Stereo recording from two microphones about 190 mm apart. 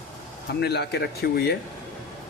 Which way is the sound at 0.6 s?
60° left (ahead or behind).